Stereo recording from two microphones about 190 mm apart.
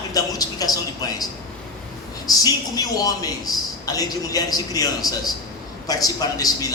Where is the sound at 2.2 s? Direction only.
20° left (ahead or behind).